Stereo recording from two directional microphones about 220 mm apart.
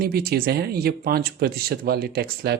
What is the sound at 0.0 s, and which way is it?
Speech, 45° right (ahead or behind).